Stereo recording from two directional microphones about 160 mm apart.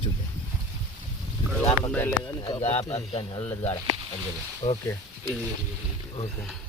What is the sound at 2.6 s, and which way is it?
Speech, 40° left (ahead or behind).